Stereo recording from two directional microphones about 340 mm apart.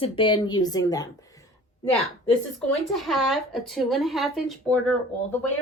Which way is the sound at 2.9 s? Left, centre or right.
Centre.